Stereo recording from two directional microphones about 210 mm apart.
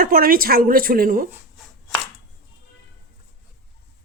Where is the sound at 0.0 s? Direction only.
45° right (ahead or behind).